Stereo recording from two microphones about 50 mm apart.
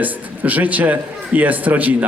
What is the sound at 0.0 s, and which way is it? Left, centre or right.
A man's voice, right.